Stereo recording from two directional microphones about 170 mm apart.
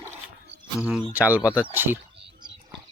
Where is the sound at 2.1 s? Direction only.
35° right (ahead or behind).